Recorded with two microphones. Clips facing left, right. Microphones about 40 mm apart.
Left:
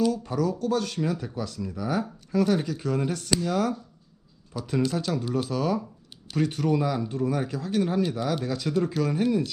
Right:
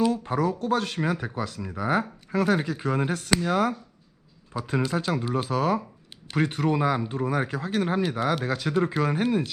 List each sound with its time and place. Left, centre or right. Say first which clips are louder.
0.0 s speech: right 1 dB; right